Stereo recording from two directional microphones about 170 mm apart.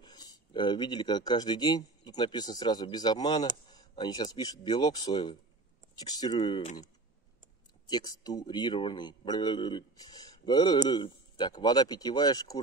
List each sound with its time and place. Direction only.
0.0 s a man's voice: 25° left (ahead or behind)
7.9 s a man's voice: 25° left (ahead or behind)